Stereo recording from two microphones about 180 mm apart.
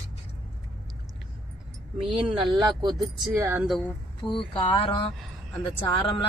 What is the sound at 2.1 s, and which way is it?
Speech, 30° right (ahead or behind).